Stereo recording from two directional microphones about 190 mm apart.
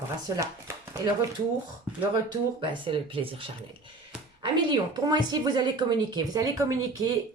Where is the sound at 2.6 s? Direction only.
25° right (ahead or behind).